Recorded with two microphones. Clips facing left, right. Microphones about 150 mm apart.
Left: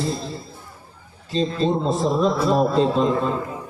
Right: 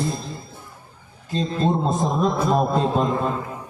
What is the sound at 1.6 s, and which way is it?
A man's voice, 50° right (ahead or behind).